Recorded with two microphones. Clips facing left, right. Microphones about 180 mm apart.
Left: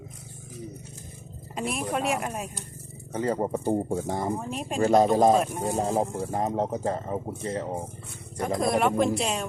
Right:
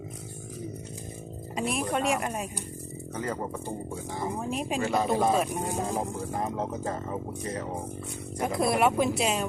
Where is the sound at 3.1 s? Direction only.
30° left (ahead or behind); by 4.2 s 50° left (ahead or behind).